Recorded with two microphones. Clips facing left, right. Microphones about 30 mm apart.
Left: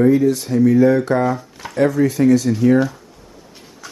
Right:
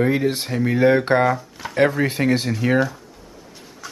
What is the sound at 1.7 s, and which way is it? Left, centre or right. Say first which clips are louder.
Speech: left 2 dB; right.